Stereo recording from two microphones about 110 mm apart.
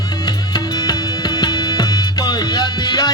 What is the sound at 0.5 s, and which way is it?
Music, 40° left (ahead or behind).